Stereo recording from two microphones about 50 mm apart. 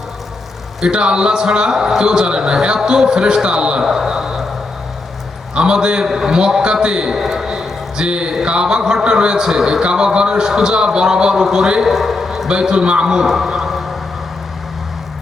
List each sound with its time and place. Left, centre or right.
0.8 s a man's voice: centre
5.5 s a man's voice: centre
11.9 s a sound: centre
12.5 s a man's voice: centre